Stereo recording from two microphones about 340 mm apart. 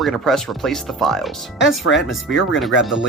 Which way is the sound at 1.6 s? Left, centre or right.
Left.